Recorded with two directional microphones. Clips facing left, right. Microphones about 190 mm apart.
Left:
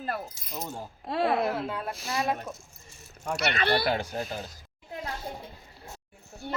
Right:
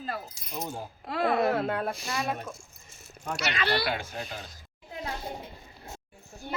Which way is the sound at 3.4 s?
55° left (ahead or behind).